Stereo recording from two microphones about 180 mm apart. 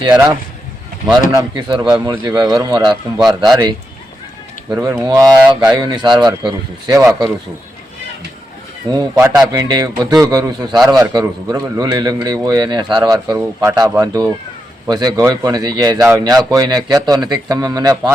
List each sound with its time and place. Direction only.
0.0 s speech: 25° right (ahead or behind)
3.2 s speech: centre (ahead or behind)
3.5 s speech: 25° right (ahead or behind)
8.9 s speech: 25° right (ahead or behind)